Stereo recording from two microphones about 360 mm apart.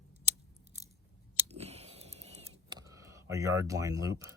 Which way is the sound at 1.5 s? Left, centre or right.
Centre.